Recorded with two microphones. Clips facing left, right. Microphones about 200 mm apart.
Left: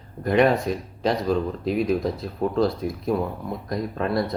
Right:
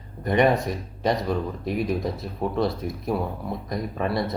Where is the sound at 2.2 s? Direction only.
Centre (ahead or behind).